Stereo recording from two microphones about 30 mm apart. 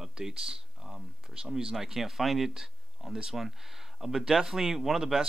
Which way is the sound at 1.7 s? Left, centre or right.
Centre.